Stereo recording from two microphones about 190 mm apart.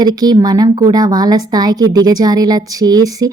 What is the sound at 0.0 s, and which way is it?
A woman's voice, 20° right (ahead or behind).